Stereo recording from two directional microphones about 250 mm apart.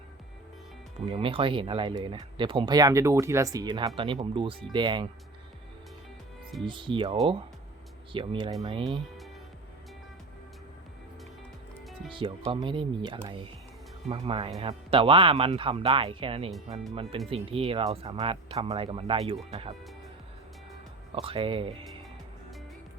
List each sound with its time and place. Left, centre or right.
1.0 s speech: right
6.7 s speech: centre
12.1 s speech: right
21.2 s speech: right